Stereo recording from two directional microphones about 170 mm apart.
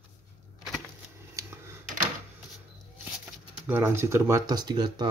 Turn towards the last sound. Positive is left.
turn(degrees=-25)  # may be behind; listen again after turning